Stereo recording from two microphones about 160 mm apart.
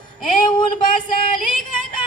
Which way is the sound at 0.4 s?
30° left (ahead or behind).